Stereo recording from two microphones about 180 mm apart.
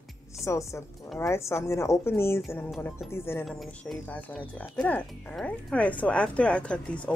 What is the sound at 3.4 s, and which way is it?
Speech, centre (ahead or behind).